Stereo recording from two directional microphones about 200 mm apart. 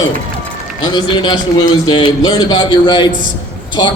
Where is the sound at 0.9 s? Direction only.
20° left (ahead or behind).